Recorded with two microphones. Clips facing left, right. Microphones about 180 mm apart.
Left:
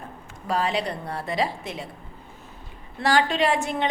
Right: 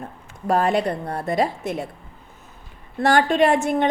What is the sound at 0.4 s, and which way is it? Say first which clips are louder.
A woman's voice: right 6 dB; 50° right (ahead or behind).